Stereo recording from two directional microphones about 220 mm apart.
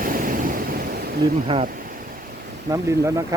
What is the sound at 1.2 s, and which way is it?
Speech, 20° right (ahead or behind).